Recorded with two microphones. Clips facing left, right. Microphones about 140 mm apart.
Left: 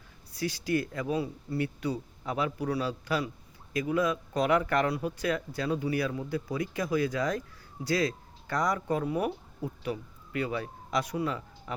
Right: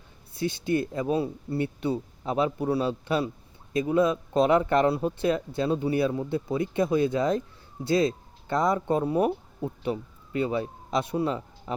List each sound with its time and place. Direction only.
0.3 s speech: 25° right (ahead or behind)